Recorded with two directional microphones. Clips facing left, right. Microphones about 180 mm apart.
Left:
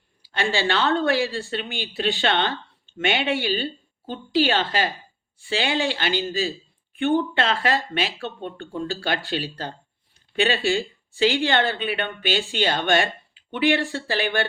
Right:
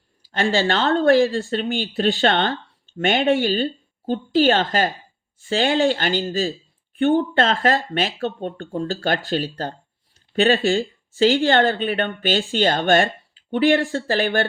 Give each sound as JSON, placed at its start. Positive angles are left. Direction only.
{"t": 0.2, "sound": "speech", "side_deg": -40}